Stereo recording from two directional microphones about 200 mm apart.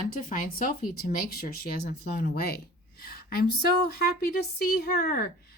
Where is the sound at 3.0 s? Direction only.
50° left (ahead or behind).